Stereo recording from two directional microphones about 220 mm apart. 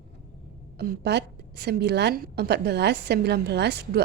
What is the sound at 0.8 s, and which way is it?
A woman's voice, 50° right (ahead or behind).